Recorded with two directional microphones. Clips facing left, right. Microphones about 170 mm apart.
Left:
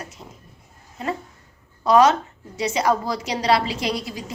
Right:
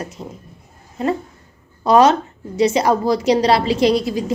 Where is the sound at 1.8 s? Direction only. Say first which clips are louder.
Right 3 dB; 25° right (ahead or behind).